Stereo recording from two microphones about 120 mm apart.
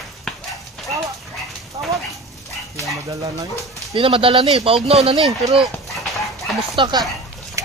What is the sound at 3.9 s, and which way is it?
Speech, 50° right (ahead or behind).